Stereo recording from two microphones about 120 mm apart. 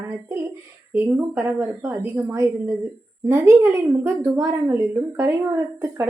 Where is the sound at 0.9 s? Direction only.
20° right (ahead or behind).